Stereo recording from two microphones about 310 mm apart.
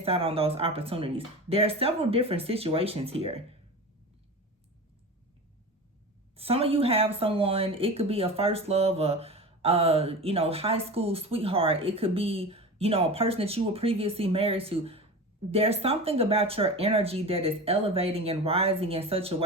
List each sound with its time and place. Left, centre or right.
0.0 s speech: centre
6.3 s speech: centre